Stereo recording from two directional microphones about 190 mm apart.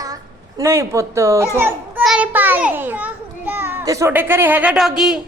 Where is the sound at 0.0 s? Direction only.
20° right (ahead or behind); by 5.2 s 5° right (ahead or behind).